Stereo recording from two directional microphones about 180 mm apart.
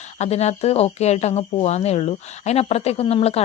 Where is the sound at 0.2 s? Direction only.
35° left (ahead or behind).